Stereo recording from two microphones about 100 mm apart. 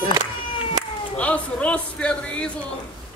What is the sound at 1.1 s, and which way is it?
A man's voice, 15° left (ahead or behind).